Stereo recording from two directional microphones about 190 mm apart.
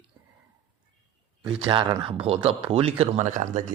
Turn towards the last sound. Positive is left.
turn(degrees=-40)  # may be behind; listen again after turning